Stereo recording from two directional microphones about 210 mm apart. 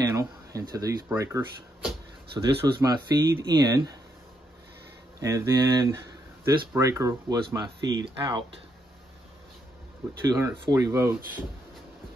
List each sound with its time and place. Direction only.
0.0 s speech: 15° right (ahead or behind)
5.2 s speech: 15° right (ahead or behind)
10.2 s speech: 15° right (ahead or behind)